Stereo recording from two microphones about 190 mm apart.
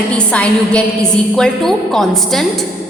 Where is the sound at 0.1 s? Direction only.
5° left (ahead or behind).